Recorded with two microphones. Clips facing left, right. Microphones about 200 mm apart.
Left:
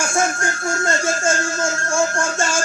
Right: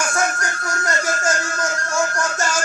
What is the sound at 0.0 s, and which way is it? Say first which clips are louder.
Music: left 2 dB; 25° left (ahead or behind).